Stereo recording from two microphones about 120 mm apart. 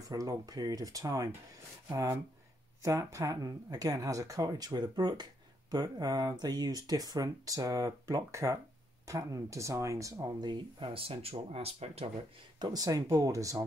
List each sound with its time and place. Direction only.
0.1 s speech: 30° right (ahead or behind); by 12.1 s 55° right (ahead or behind)
12.5 s speech: 35° right (ahead or behind)